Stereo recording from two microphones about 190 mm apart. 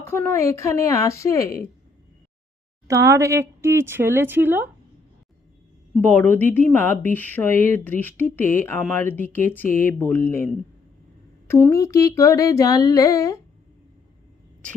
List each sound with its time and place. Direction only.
0.1 s humming: 15° left (ahead or behind)
2.8 s speech: 15° right (ahead or behind)
6.1 s humming: 10° left (ahead or behind)